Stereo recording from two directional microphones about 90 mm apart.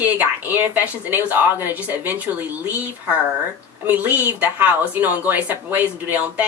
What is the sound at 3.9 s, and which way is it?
Speech, 20° right (ahead or behind).